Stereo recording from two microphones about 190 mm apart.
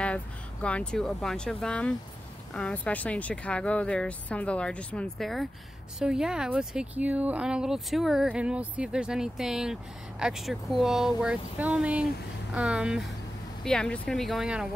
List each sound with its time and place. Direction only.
0.0 s speech: 5° left (ahead or behind)